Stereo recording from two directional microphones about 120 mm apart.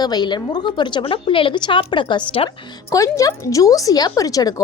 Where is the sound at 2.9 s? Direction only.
30° left (ahead or behind).